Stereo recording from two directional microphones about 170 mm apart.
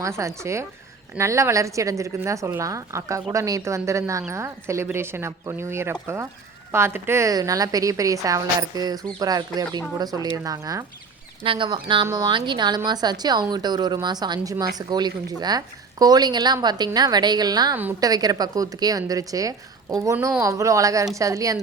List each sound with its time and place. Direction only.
0.0 s a woman's voice: 15° right (ahead or behind)
11.4 s a woman's voice: 30° right (ahead or behind)